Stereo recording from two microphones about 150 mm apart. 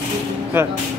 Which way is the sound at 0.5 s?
15° right (ahead or behind).